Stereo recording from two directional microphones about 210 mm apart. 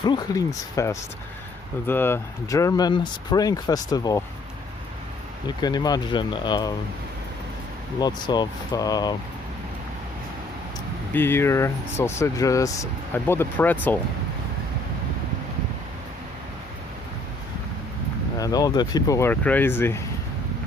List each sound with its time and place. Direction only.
0.0 s speech: 20° left (ahead or behind)
5.5 s speech: 20° left (ahead or behind)
7.9 s speech: 20° left (ahead or behind)
11.1 s speech: 10° left (ahead or behind)
18.3 s speech: 15° left (ahead or behind)